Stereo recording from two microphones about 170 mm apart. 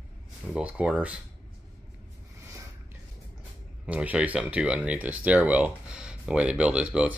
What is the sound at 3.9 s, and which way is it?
Speech, 5° right (ahead or behind).